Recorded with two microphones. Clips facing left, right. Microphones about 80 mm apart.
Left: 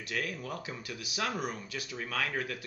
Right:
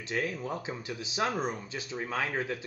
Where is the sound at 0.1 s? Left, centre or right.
Right.